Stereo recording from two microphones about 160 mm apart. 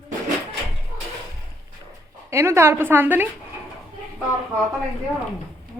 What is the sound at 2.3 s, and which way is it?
Speech, 15° right (ahead or behind).